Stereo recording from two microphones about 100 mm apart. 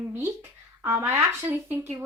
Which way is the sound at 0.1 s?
25° right (ahead or behind).